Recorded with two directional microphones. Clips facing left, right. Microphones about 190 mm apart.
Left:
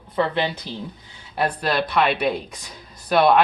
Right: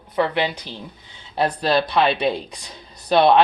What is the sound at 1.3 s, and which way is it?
Speech, 30° right (ahead or behind).